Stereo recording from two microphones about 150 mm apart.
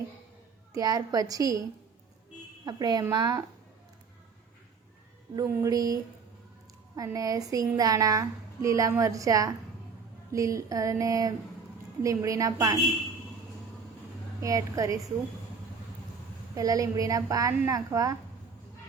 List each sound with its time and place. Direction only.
0.7 s a woman's voice: 25° right (ahead or behind)
2.6 s a woman's voice: 25° right (ahead or behind)
5.5 s a woman's voice: 25° right (ahead or behind)
14.4 s a woman's voice: 20° right (ahead or behind)
16.6 s a woman's voice: 25° right (ahead or behind)